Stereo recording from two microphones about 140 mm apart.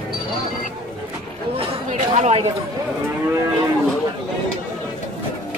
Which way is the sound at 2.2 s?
50° right (ahead or behind).